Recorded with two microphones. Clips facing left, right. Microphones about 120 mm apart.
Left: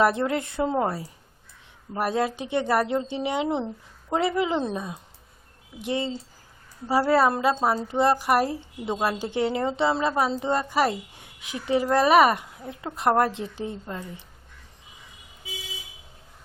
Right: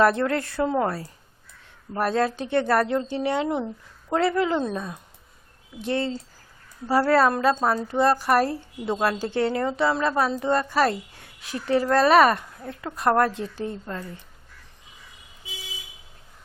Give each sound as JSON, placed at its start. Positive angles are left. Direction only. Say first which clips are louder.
{"t": 0.0, "sound": "a woman's voice", "louder": "right 2 dB", "side_deg": 15}